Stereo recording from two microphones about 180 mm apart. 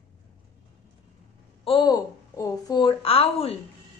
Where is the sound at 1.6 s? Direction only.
25° left (ahead or behind).